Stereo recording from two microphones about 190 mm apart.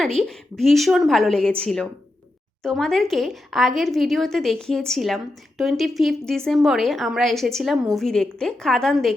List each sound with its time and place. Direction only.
0.0 s a woman's voice: centre (ahead or behind)